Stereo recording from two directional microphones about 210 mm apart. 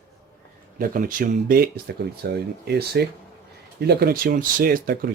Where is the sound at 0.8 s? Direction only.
40° right (ahead or behind).